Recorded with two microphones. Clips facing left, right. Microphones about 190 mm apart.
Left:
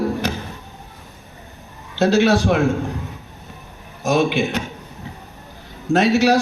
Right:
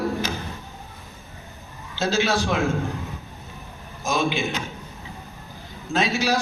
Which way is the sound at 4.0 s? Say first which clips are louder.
Left 6 dB; 65° left (ahead or behind).